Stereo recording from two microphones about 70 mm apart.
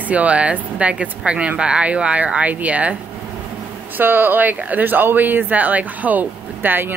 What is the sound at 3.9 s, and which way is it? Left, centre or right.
Speech, right.